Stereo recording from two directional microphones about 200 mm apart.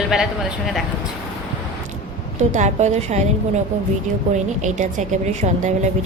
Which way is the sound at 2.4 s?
35° right (ahead or behind).